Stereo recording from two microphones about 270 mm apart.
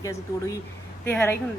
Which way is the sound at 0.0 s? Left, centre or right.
Centre.